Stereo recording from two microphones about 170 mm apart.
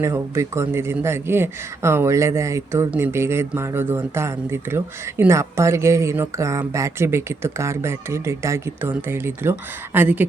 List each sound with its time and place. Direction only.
0.0 s speech: 15° right (ahead or behind)